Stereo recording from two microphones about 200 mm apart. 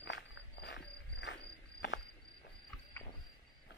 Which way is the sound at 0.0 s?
65° left (ahead or behind).